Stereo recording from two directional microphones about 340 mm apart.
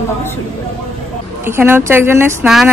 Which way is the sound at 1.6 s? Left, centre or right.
Centre.